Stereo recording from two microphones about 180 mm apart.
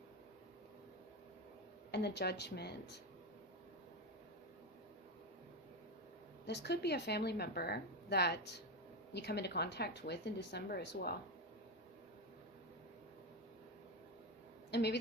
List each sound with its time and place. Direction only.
1.9 s a woman's voice: 70° left (ahead or behind)
6.4 s a woman's voice: 70° left (ahead or behind)
14.7 s a woman's voice: 70° left (ahead or behind)